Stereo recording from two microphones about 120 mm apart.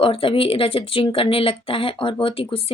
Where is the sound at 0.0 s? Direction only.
50° left (ahead or behind).